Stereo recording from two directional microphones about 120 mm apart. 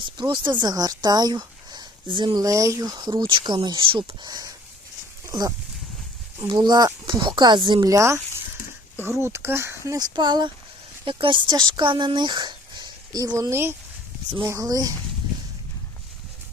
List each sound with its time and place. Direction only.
0.0 s speech: 40° right (ahead or behind)
4.3 s speech: 30° right (ahead or behind)
7.9 s speech: 25° right (ahead or behind)
10.2 s speech: 40° right (ahead or behind)